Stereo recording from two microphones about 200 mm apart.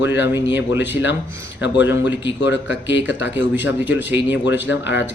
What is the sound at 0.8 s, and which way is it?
Speech, 65° left (ahead or behind).